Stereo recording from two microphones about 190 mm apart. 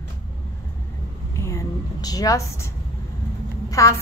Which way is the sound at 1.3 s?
15° left (ahead or behind).